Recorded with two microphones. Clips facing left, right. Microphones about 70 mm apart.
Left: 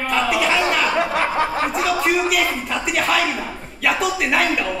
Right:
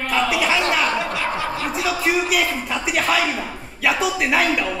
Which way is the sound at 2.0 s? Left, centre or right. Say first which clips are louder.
Left 1 dB; centre.